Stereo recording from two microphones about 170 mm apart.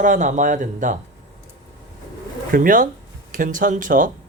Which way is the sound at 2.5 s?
55° right (ahead or behind).